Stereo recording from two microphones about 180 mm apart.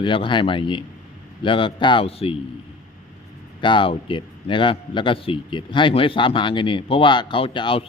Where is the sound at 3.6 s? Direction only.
25° left (ahead or behind).